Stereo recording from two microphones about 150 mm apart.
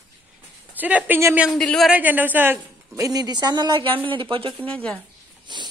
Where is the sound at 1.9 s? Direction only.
10° right (ahead or behind); by 3.9 s 30° right (ahead or behind).